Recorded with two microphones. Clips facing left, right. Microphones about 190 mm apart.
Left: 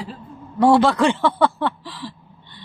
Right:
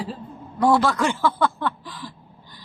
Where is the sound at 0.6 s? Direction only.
25° left (ahead or behind).